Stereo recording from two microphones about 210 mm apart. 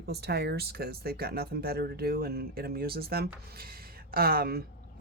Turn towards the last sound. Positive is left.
turn(degrees=-45)  # may be behind; listen again after turning